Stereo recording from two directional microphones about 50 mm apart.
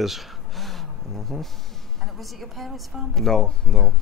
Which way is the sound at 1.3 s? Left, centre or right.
Centre.